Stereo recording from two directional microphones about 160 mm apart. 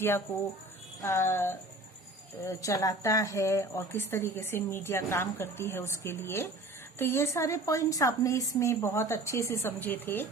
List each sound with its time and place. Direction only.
1.0 s speech: 15° left (ahead or behind)